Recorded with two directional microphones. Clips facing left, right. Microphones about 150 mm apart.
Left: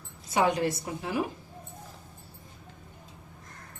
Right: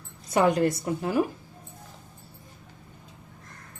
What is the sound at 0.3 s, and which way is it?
Speech, 50° right (ahead or behind).